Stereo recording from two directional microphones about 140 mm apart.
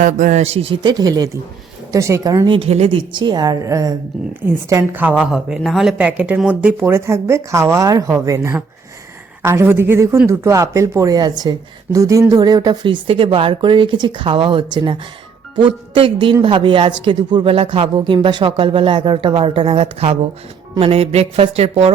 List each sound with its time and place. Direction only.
0.0 s speech: 70° right (ahead or behind)
0.4 s speech: 40° right (ahead or behind)
2.6 s a woman's voice: 50° right (ahead or behind)